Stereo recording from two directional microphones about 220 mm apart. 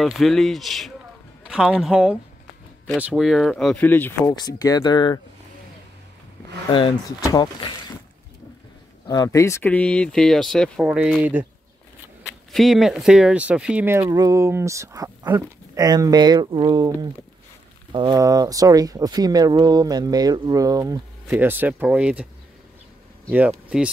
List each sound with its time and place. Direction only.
0.0 s speech: centre (ahead or behind); by 5.2 s 20° left (ahead or behind)
6.7 s speech: 20° left (ahead or behind)
9.0 s speech: 15° left (ahead or behind); by 10.9 s centre (ahead or behind)
12.5 s speech: centre (ahead or behind)